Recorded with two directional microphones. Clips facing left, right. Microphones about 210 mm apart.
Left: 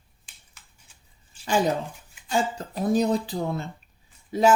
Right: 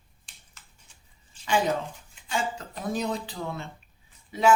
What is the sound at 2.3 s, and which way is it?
Speech, 40° left (ahead or behind).